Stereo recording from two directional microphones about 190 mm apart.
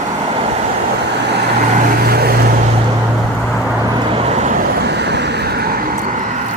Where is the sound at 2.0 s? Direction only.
55° right (ahead or behind).